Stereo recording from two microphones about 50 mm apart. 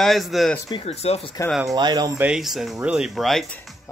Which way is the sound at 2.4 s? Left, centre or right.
Centre.